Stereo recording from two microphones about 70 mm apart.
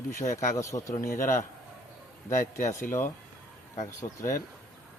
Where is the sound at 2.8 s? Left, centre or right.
Left.